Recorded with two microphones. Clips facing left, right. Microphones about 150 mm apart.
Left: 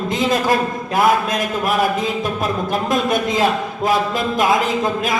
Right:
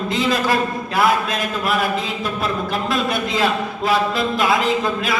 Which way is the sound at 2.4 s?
45° left (ahead or behind).